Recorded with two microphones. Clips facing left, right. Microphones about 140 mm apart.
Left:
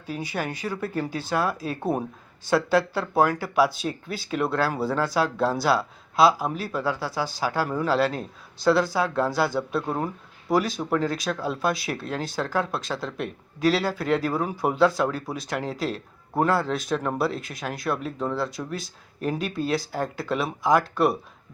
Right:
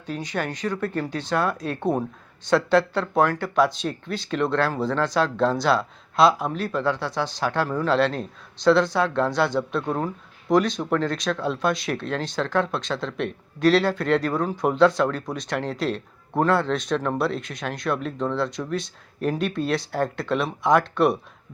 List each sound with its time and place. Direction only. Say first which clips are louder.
0.0 s speech: right 2 dB; 5° left (ahead or behind)